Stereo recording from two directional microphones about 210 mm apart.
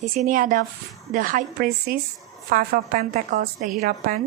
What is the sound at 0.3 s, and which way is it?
A woman's voice, 40° right (ahead or behind).